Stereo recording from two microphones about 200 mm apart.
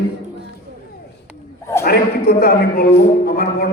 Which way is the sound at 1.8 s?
50° left (ahead or behind).